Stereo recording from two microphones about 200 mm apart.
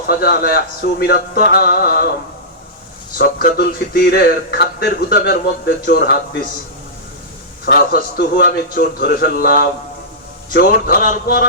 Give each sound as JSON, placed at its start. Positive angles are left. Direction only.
{"t": 0.1, "sound": "a man's voice", "side_deg": 50}
{"t": 3.2, "sound": "a man's voice", "side_deg": 45}
{"t": 7.6, "sound": "a man's voice", "side_deg": 50}